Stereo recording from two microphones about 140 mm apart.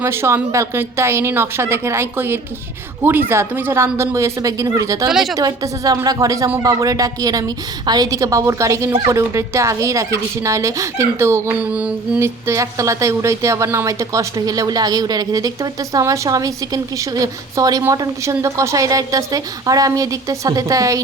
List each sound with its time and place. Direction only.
0.0 s a woman's voice: 15° right (ahead or behind)
5.0 s a woman's voice: centre (ahead or behind)
5.4 s a woman's voice: 30° right (ahead or behind); by 12.3 s 10° right (ahead or behind)
12.5 s a woman's voice: 25° right (ahead or behind)